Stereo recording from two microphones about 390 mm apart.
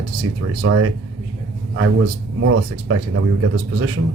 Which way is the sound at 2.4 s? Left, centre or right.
Right.